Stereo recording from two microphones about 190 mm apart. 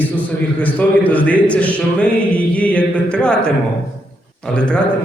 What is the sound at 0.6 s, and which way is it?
A man's voice, 10° left (ahead or behind).